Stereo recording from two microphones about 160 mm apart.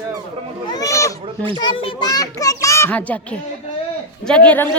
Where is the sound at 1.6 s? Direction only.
30° left (ahead or behind); by 4.6 s 10° left (ahead or behind).